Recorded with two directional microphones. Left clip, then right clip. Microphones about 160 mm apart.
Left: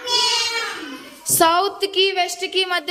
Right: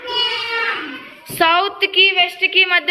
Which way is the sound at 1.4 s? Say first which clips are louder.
Right 2 dB; 40° left (ahead or behind).